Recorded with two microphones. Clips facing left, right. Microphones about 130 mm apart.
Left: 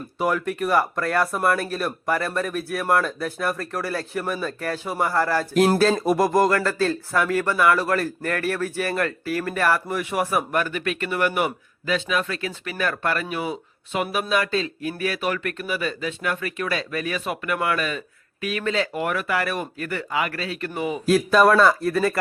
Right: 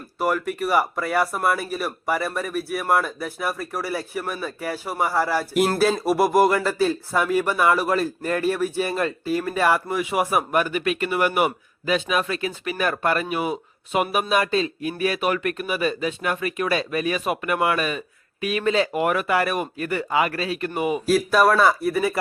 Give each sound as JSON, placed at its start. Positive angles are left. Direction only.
{"t": 0.2, "sound": "speech", "side_deg": -5}
{"t": 21.1, "sound": "speech", "side_deg": -5}